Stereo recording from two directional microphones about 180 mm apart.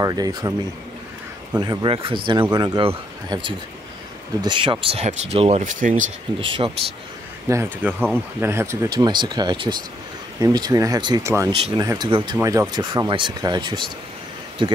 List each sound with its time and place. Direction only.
0.0 s speech: 20° right (ahead or behind)
1.6 s speech: 25° right (ahead or behind); by 6.0 s 45° right (ahead or behind)
6.4 s speech: 30° right (ahead or behind)
7.4 s speech: 15° right (ahead or behind)